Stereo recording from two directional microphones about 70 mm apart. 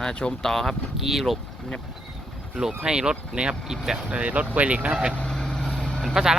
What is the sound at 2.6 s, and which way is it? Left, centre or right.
Speech, centre.